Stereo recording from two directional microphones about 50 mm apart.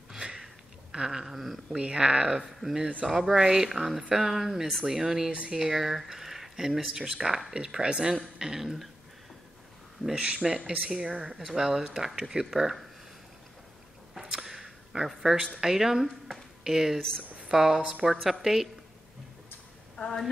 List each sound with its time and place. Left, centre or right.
0.1 s sniff: centre
0.9 s speech: centre
1.8 s speech: right
2.3 s speech: centre
10.1 s speech: right
14.1 s a sound: centre
15.6 s a woman's voice: centre